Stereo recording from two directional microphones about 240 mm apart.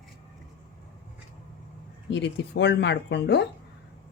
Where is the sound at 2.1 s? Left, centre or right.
Left.